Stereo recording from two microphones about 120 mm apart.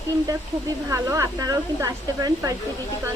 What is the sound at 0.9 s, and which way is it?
Speech, 25° right (ahead or behind).